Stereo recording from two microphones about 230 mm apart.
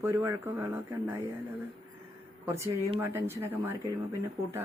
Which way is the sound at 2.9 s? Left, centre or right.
Centre.